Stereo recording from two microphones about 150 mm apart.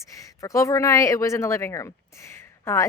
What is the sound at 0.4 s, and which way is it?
Speech, 20° left (ahead or behind).